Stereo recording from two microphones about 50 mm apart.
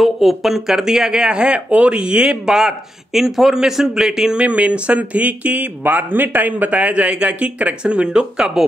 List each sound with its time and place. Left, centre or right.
0.0 s speech: centre
4.4 s speech: right